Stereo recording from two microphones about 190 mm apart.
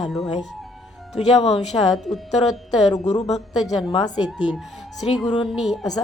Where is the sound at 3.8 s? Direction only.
25° left (ahead or behind).